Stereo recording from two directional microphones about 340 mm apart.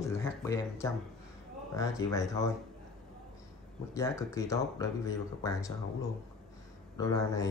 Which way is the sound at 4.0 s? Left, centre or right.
Centre.